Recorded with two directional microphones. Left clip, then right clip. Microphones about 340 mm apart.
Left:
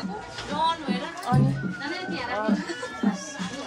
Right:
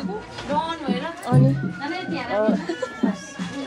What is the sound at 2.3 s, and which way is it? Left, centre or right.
Speech, centre.